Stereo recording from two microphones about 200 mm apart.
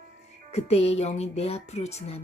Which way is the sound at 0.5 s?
30° left (ahead or behind).